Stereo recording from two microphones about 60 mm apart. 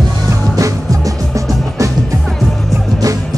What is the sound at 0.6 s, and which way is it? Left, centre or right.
Music, right.